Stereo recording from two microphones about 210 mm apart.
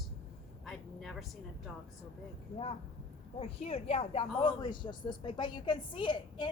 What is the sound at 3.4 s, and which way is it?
A woman's voice, 25° left (ahead or behind).